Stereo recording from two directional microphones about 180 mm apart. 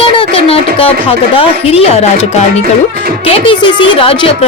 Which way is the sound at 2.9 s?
55° right (ahead or behind).